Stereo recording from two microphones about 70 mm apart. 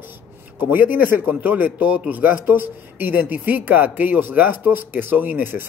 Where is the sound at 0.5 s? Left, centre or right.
Right.